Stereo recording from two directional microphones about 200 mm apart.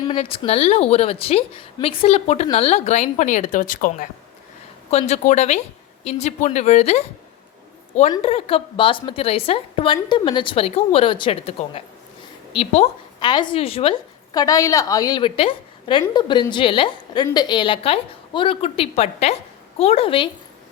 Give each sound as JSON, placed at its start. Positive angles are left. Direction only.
{"t": 0.0, "sound": "a woman's voice", "side_deg": 25}
{"t": 4.9, "sound": "a woman's voice", "side_deg": 30}
{"t": 8.1, "sound": "a woman's voice", "side_deg": 30}
{"t": 14.3, "sound": "a woman's voice", "side_deg": 15}